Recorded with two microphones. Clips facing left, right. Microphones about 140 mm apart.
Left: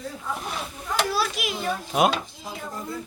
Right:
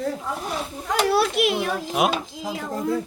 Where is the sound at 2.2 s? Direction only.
90° right.